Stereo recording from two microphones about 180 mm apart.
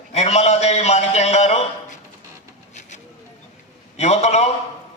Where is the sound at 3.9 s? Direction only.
40° left (ahead or behind).